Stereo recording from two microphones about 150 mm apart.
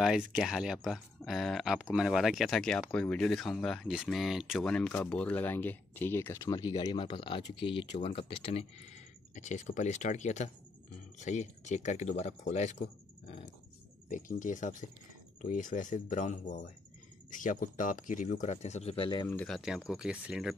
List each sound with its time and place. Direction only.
0.0 s speech: 5° right (ahead or behind); by 12.8 s 50° left (ahead or behind)
14.0 s speech: 60° left (ahead or behind); by 19.2 s 35° left (ahead or behind)
19.2 s speech: 10° left (ahead or behind)
19.5 s speech: centre (ahead or behind)